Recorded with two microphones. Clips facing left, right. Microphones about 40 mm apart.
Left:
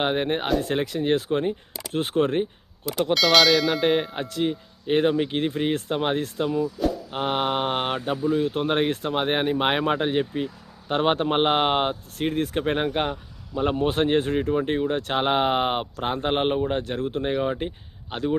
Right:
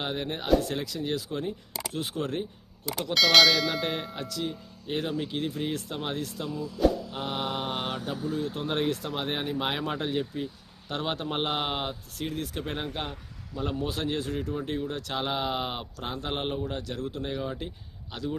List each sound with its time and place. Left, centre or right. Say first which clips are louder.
0.0 s speech: left 8 dB; left
3.2 s speech: left 1 dB; centre
3.9 s speech: left 9 dB; left